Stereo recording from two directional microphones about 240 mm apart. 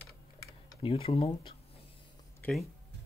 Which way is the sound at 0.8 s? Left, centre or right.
Left.